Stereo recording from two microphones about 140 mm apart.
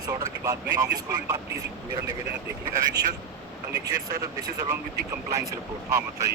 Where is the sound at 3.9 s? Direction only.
25° right (ahead or behind).